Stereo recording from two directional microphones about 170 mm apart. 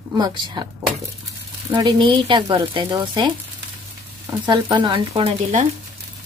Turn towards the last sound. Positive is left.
turn(degrees=-40)  # may be behind; listen again after turning